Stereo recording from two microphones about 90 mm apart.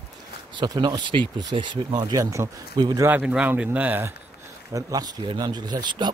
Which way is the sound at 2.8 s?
50° right (ahead or behind).